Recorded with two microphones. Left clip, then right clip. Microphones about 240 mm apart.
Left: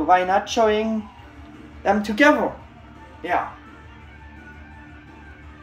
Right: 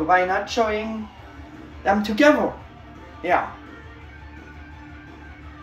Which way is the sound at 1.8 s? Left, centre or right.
Centre.